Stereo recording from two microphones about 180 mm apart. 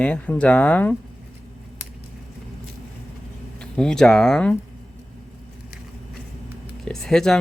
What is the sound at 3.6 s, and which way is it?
Speech, 5° left (ahead or behind).